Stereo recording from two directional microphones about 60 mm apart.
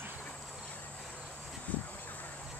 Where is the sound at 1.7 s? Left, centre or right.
Left.